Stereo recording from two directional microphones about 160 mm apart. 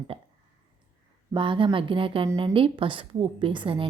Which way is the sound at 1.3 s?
30° right (ahead or behind).